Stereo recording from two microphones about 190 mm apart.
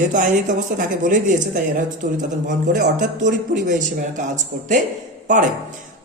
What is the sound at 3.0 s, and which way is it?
Speech, 40° right (ahead or behind).